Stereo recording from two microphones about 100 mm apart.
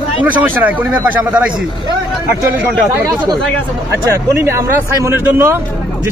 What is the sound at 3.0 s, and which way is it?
Speech, 40° right (ahead or behind).